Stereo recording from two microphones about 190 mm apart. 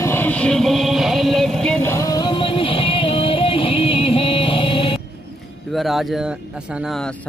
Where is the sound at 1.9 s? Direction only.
20° left (ahead or behind).